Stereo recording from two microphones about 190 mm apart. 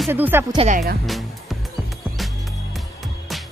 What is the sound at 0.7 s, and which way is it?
Speech, 40° right (ahead or behind).